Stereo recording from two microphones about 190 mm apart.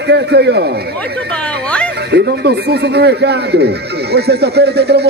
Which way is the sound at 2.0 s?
60° right (ahead or behind).